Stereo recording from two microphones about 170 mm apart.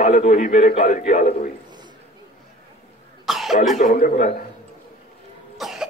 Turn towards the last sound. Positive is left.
turn(degrees=0)  # may be behind; listen again after turning